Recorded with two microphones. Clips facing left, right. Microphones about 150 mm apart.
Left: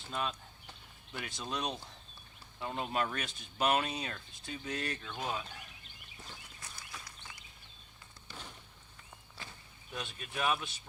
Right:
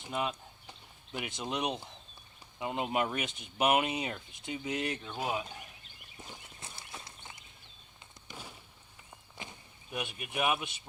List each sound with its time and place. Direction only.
0.0 s speech: 15° right (ahead or behind)
6.2 s walk: 25° right (ahead or behind)
8.3 s fireworks: 10° right (ahead or behind)
9.4 s speech: 15° right (ahead or behind)